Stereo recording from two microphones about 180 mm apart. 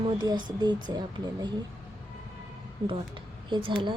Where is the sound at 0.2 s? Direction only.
25° right (ahead or behind).